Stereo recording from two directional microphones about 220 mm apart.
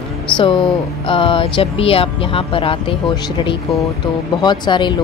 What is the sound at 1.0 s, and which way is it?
Speech, 25° left (ahead or behind).